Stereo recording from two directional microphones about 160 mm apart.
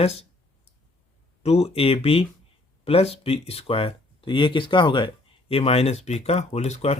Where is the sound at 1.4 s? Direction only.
40° left (ahead or behind).